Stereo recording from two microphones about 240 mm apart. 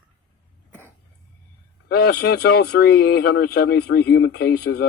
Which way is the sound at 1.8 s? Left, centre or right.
Left.